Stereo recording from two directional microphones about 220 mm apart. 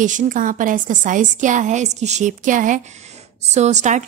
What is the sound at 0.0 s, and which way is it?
A woman's voice, 35° right (ahead or behind).